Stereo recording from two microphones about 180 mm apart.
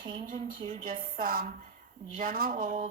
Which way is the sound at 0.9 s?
50° right (ahead or behind).